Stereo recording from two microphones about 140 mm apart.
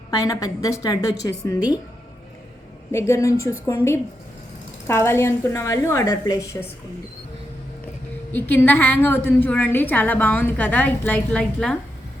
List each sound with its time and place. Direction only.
0.1 s a woman's voice: 25° left (ahead or behind)
2.9 s a woman's voice: 20° left (ahead or behind)
8.3 s a woman's voice: 15° left (ahead or behind)